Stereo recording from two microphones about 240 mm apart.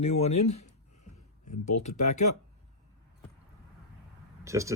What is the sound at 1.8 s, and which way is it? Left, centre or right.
Speech, left.